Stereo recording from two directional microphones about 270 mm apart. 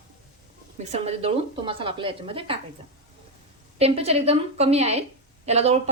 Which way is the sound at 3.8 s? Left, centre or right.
Right.